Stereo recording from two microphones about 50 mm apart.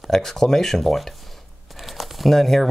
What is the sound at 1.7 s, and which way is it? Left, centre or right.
Crumpling, centre.